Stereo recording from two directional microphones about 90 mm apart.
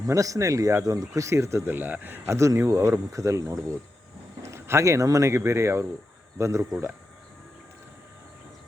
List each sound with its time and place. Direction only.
0.1 s speech: 35° right (ahead or behind); by 2.3 s 20° right (ahead or behind)
2.3 s speech: 35° right (ahead or behind)